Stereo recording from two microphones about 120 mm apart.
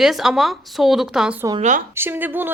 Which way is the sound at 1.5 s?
90° right.